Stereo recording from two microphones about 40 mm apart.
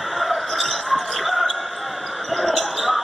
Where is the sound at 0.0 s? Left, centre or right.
Centre.